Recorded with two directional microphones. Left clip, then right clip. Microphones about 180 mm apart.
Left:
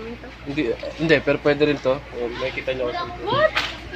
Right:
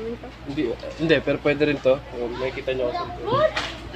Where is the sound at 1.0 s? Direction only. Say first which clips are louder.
Left 2 dB; 25° left (ahead or behind).